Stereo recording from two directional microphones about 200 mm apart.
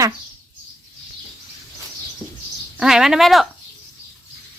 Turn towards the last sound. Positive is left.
turn(degrees=0)  # may be behind; listen again after turning